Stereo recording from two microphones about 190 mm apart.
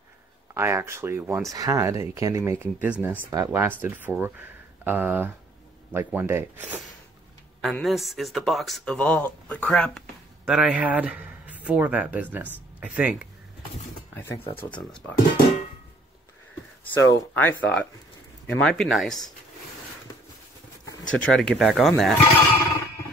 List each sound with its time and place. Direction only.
0.6 s speech: 15° right (ahead or behind)
7.6 s speech: centre (ahead or behind)
14.1 s speech: 10° left (ahead or behind)
16.8 s speech: 10° left (ahead or behind)
21.0 s speech: 5° left (ahead or behind)